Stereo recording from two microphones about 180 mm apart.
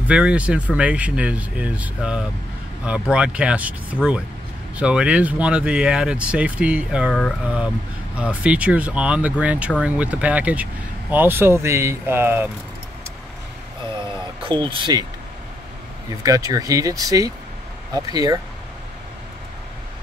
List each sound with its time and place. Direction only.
0.1 s speech: 5° right (ahead or behind)
8.2 s speech: 5° right (ahead or behind)
14.4 s speech: 25° right (ahead or behind)
16.2 s speech: 20° right (ahead or behind)